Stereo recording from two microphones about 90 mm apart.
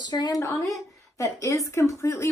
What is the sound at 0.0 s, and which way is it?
A woman's voice, 50° left (ahead or behind).